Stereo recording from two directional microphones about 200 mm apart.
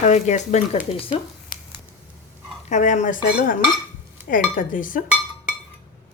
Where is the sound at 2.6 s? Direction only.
40° left (ahead or behind).